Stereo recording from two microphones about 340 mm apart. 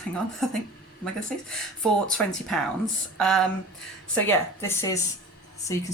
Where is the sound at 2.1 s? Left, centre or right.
Centre.